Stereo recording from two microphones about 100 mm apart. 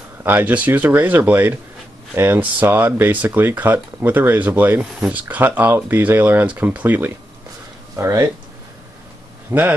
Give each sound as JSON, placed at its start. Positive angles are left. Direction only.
{"t": 0.2, "sound": "speech", "side_deg": -20}
{"t": 7.9, "sound": "speech", "side_deg": -30}
{"t": 9.5, "sound": "speech", "side_deg": -20}